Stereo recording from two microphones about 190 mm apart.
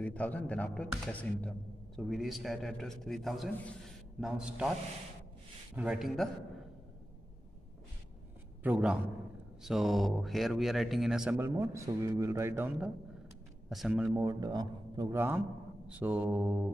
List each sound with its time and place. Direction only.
0.0 s speech: 5° left (ahead or behind)
5.8 s speech: 5° right (ahead or behind)
8.6 s a man's voice: 10° right (ahead or behind)
14.1 s a man's voice: 15° right (ahead or behind)